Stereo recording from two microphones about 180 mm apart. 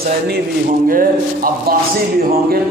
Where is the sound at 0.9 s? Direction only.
50° right (ahead or behind).